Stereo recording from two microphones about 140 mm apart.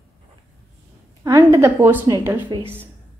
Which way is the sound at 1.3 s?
25° right (ahead or behind).